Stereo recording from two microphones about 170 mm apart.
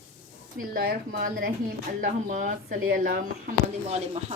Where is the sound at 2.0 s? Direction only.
50° right (ahead or behind).